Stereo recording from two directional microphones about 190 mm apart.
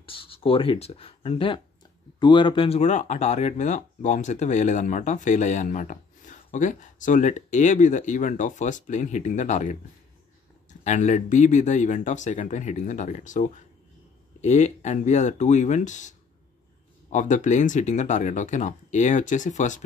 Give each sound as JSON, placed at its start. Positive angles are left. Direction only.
{"t": 0.0, "sound": "speech", "side_deg": 30}
{"t": 10.8, "sound": "speech", "side_deg": 40}